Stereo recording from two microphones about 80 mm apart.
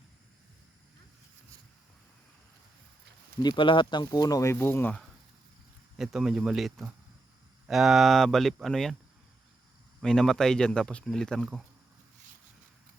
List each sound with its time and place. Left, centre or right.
3.4 s speech: left
4.0 s speech: left
6.0 s speech: centre
10.0 s speech: centre